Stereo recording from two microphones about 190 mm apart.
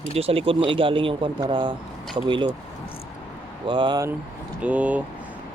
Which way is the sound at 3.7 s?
25° right (ahead or behind).